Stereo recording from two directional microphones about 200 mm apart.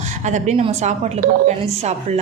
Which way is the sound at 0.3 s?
35° right (ahead or behind).